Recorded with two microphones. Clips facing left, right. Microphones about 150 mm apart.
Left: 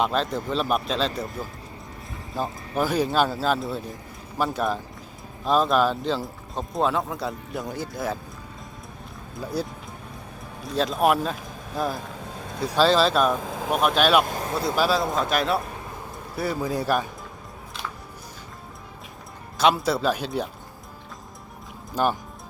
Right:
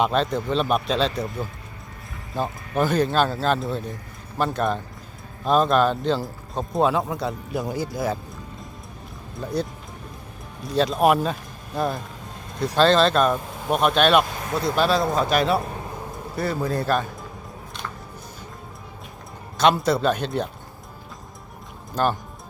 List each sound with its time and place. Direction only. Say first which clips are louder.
0.0 s speech: right 3 dB; centre (ahead or behind)
9.3 s speech: right 2 dB; 5° left (ahead or behind)
14.3 s vehicle: left 3 dB; 35° left (ahead or behind)
14.8 s a man's voice: right 2 dB; 5° left (ahead or behind)
19.5 s speech: right 2 dB; 5° left (ahead or behind)